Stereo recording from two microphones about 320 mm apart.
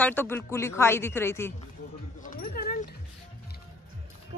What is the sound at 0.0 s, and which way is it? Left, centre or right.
Speech, centre.